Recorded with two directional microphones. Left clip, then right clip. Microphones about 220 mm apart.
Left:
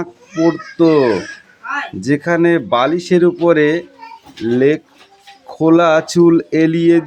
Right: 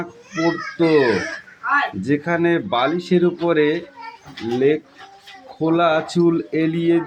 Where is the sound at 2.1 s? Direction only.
30° left (ahead or behind).